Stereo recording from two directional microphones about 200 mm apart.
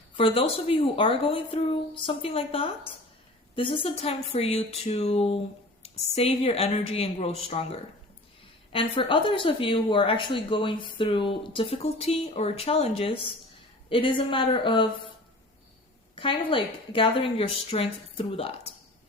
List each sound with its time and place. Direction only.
0.2 s speech: 30° left (ahead or behind)
16.1 s speech: 25° left (ahead or behind)